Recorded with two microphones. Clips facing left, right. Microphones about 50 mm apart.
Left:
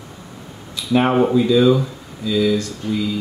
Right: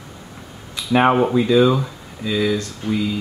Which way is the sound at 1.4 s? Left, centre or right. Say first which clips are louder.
Left 1 dB; centre.